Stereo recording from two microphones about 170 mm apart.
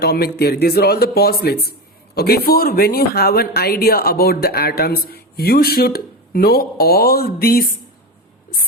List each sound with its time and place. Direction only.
0.0 s a man's voice: 70° left (ahead or behind)